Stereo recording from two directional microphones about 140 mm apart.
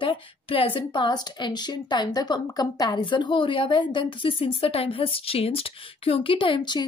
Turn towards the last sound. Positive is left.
turn(degrees=35)  # may be behind; listen again after turning